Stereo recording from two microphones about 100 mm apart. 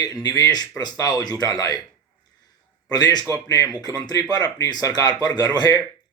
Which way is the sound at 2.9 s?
40° left (ahead or behind).